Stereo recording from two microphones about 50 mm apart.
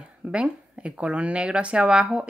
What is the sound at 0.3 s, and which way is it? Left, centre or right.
Speech, right.